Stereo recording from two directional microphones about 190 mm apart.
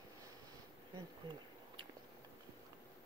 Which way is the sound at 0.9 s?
25° right (ahead or behind).